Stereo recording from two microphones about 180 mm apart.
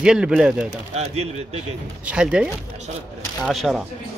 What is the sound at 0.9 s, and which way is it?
Speech, 35° right (ahead or behind).